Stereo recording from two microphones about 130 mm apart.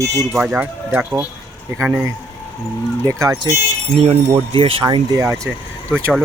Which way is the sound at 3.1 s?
25° right (ahead or behind).